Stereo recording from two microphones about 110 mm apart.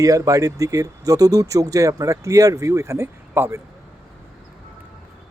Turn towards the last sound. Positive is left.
turn(degrees=-25)  # may be behind; listen again after turning